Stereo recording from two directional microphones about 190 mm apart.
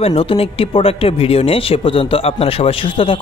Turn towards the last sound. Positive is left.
turn(degrees=25)  # may be behind; listen again after turning